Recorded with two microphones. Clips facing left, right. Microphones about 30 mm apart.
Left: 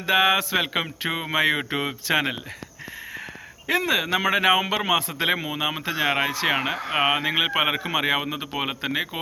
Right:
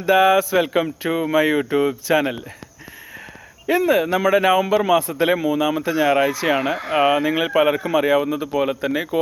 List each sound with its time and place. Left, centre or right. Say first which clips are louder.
0.0 s speech: right 5 dB; left
3.7 s speech: right 5 dB; left
5.1 s a man's voice: right 6 dB; left
7.1 s a man's voice: right 4 dB; left